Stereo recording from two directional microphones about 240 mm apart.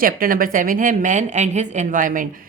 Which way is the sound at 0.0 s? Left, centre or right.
Right.